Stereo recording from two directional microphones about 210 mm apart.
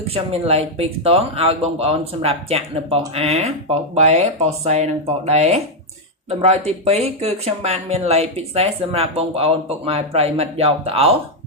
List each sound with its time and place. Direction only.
0.1 s speech: 30° right (ahead or behind)